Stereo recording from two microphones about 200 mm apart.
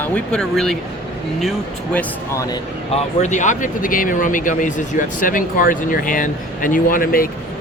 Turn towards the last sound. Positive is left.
turn(degrees=45)  # may be behind; listen again after turning